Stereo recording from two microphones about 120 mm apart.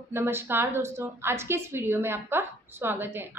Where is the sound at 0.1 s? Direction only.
20° right (ahead or behind).